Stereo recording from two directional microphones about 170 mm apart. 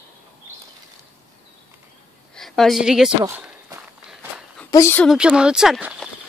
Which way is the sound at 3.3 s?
15° right (ahead or behind).